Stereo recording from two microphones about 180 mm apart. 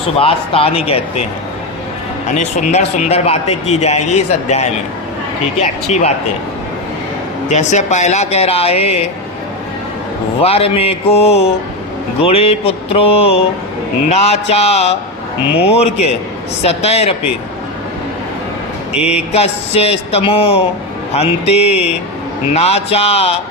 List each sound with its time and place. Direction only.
0.2 s a man's voice: 30° left (ahead or behind)
2.3 s a man's voice: 40° left (ahead or behind)
7.5 s a man's voice: 40° left (ahead or behind)
10.4 s a man's voice: 35° left (ahead or behind)
18.9 s a man's voice: 5° right (ahead or behind)
19.3 s a man's voice: 35° left (ahead or behind)